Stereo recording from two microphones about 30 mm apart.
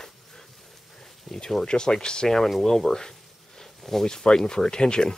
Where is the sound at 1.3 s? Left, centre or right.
Centre.